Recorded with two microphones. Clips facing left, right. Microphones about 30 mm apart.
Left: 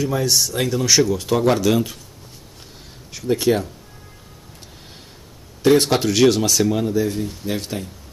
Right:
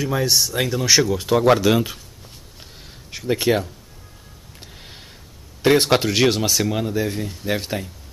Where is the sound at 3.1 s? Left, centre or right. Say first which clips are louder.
Left 1 dB; centre.